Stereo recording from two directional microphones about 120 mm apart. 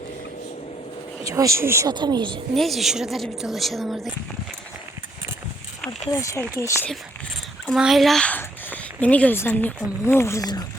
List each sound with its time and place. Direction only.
1.2 s speech: 25° right (ahead or behind)
1.9 s speech: 35° right (ahead or behind)
2.6 s a woman's voice: centre (ahead or behind)
6.1 s speech: 25° left (ahead or behind)
7.7 s speech: centre (ahead or behind); by 10.7 s 30° left (ahead or behind)